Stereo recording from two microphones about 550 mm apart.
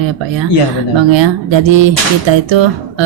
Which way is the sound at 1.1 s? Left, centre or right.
Right.